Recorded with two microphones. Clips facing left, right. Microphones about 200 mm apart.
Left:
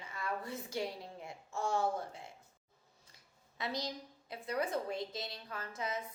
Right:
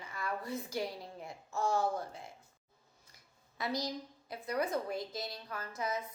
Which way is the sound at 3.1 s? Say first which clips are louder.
Even; 25° left (ahead or behind).